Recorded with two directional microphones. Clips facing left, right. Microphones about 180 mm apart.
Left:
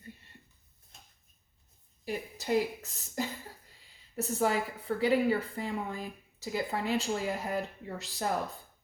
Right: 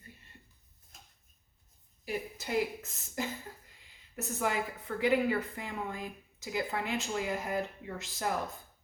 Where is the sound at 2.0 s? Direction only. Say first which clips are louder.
Left 2 dB; 40° left (ahead or behind).